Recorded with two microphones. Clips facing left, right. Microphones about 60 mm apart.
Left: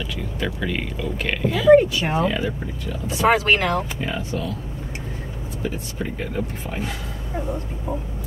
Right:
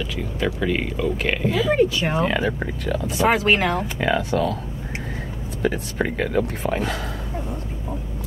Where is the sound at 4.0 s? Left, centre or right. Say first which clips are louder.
Right 6 dB; right.